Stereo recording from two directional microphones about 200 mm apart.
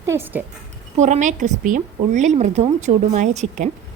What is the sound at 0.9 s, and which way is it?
A woman's voice, 35° right (ahead or behind).